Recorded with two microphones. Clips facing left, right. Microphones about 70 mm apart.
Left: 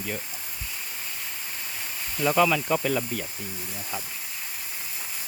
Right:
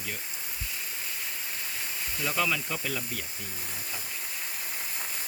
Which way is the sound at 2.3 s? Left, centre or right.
Left.